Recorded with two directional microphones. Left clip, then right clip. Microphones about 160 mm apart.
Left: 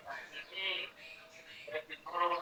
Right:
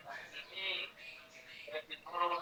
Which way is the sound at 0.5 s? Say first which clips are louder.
Left 2 dB; centre (ahead or behind).